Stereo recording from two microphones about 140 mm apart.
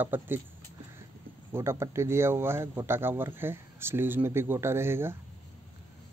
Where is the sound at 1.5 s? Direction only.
20° right (ahead or behind).